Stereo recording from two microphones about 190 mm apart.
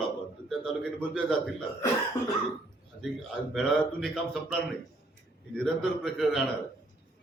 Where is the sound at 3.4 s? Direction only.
5° right (ahead or behind).